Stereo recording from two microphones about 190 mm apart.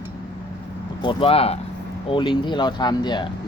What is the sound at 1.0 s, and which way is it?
Speech, 30° left (ahead or behind).